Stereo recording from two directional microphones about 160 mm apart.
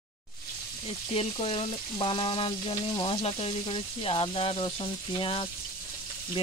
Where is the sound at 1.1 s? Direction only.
35° left (ahead or behind).